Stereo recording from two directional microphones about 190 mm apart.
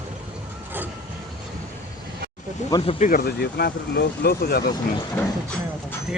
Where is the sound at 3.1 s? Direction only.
55° left (ahead or behind).